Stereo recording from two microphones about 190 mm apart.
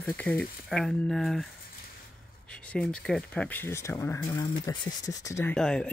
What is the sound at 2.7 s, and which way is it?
Speech, 5° left (ahead or behind).